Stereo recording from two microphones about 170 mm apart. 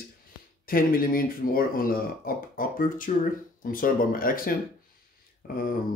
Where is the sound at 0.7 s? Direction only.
55° left (ahead or behind).